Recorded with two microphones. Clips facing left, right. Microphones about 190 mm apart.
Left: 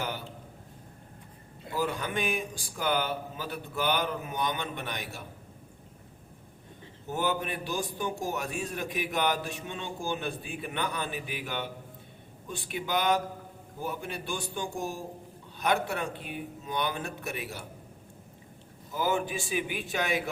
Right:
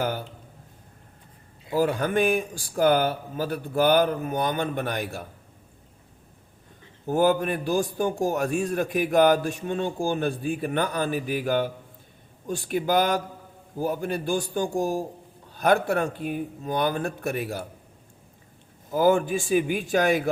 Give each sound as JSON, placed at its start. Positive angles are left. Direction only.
{"t": 1.7, "sound": "a man's voice", "side_deg": -50}
{"t": 7.1, "sound": "a man's voice", "side_deg": -50}
{"t": 18.9, "sound": "a man's voice", "side_deg": -50}